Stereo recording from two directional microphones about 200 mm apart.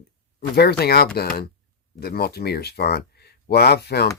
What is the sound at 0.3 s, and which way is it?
Speech, 55° left (ahead or behind).